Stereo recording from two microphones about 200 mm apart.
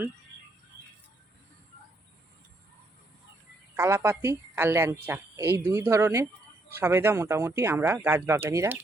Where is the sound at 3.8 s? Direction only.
10° right (ahead or behind).